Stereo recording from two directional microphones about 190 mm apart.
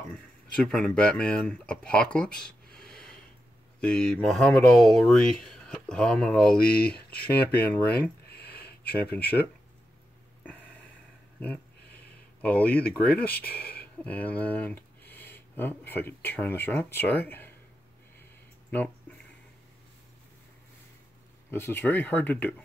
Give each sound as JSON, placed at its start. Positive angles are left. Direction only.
{"t": 0.6, "sound": "speech", "side_deg": 5}
{"t": 10.4, "sound": "a sound", "side_deg": 10}
{"t": 12.4, "sound": "speech", "side_deg": 5}
{"t": 13.5, "sound": "speech", "side_deg": 50}
{"t": 14.0, "sound": "speech", "side_deg": 5}
{"t": 18.7, "sound": "speech", "side_deg": 10}
{"t": 21.5, "sound": "speech", "side_deg": 15}